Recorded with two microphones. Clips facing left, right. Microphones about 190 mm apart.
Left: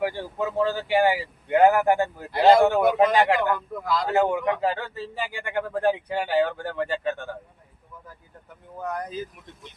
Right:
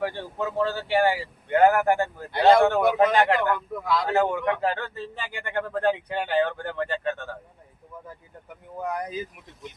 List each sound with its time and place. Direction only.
0.0 s speech: 15° left (ahead or behind)
2.3 s speech: centre (ahead or behind)
3.2 s speech: 10° left (ahead or behind)
3.5 s speech: centre (ahead or behind)
8.8 s speech: 10° right (ahead or behind)